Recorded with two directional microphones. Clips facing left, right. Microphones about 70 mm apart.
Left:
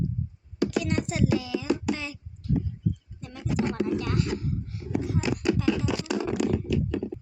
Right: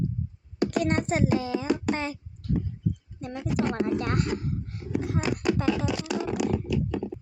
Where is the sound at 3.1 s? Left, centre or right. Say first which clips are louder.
Right 3 dB; right.